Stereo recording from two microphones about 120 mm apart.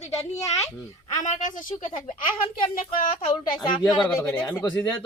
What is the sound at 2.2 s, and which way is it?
A child's voice, 50° left (ahead or behind).